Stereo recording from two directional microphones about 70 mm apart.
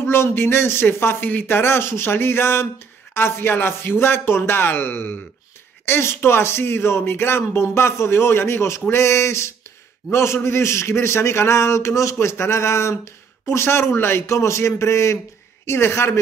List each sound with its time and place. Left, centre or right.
0.0 s a man's voice: left